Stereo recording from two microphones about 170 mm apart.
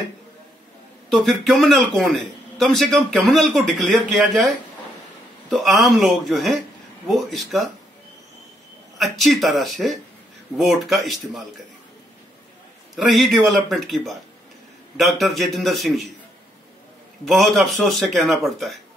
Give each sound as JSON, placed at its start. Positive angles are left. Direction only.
{"t": 1.1, "sound": "a man's voice", "side_deg": 0}
{"t": 8.9, "sound": "a man's voice", "side_deg": 0}
{"t": 12.9, "sound": "a man's voice", "side_deg": 0}
{"t": 17.2, "sound": "a man's voice", "side_deg": 0}